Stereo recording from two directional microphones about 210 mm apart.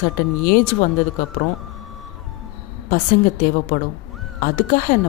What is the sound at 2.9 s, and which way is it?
Speech, 40° left (ahead or behind).